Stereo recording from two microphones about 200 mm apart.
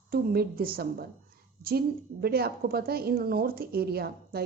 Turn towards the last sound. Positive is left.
turn(degrees=-50)  # may be behind; listen again after turning